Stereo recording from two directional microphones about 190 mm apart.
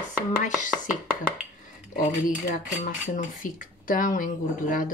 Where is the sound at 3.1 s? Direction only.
45° left (ahead or behind).